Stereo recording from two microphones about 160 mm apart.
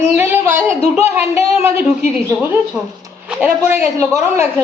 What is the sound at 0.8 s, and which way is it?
Speech, 45° left (ahead or behind).